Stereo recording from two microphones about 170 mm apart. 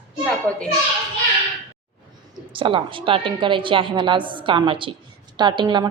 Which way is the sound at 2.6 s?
30° right (ahead or behind).